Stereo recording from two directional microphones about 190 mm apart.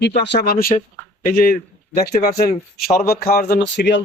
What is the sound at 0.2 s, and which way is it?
Speech, 60° left (ahead or behind).